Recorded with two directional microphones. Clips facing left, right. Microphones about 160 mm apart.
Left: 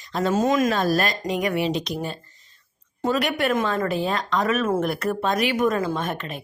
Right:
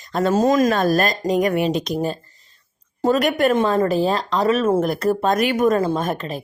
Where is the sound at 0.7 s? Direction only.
50° right (ahead or behind).